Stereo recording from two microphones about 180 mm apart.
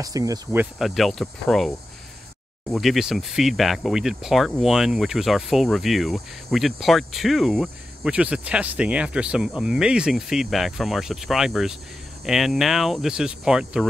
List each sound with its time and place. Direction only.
0.0 s speech: 20° right (ahead or behind)
0.7 s speech: centre (ahead or behind)
2.7 s speech: centre (ahead or behind)